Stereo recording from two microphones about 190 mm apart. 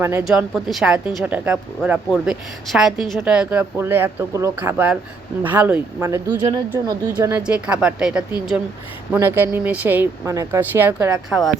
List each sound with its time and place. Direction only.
0.0 s speech: 15° right (ahead or behind)
0.3 s speech: centre (ahead or behind)